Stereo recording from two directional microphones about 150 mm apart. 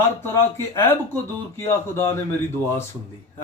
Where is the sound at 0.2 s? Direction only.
20° left (ahead or behind).